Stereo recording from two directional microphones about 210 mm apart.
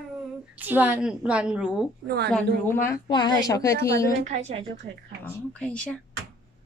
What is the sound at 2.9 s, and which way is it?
A woman's voice, 20° left (ahead or behind).